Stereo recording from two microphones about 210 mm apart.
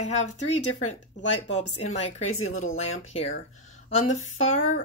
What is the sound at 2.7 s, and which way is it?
Speech, 30° left (ahead or behind).